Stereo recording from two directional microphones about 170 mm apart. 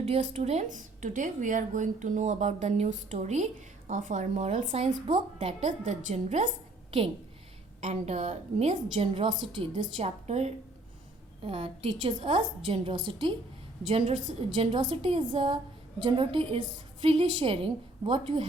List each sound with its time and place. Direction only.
0.0 s speech: 35° right (ahead or behind)
7.8 s a woman's voice: 40° right (ahead or behind)
14.5 s a woman's voice: 30° right (ahead or behind)